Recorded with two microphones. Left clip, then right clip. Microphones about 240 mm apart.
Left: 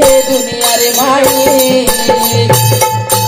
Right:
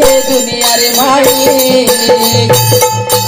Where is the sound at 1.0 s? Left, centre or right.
Right.